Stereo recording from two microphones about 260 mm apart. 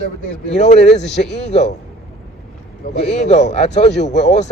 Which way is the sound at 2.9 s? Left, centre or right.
Left.